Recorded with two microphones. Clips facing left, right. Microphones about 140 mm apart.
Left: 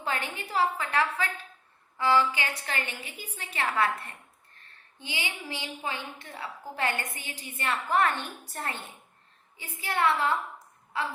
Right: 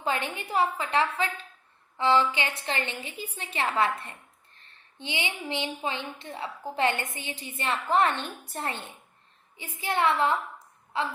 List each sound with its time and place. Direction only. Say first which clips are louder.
0.0 s a woman's voice: right 3 dB; 20° right (ahead or behind)